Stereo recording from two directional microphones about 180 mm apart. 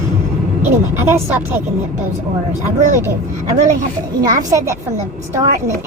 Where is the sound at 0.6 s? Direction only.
15° right (ahead or behind).